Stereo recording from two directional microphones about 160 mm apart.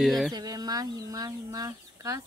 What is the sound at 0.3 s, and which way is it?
Speech, 25° right (ahead or behind).